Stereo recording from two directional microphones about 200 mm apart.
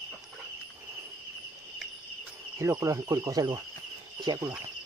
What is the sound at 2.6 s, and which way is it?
Speech, 15° right (ahead or behind).